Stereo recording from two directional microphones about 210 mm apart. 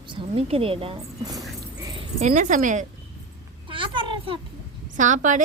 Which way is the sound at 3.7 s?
25° right (ahead or behind).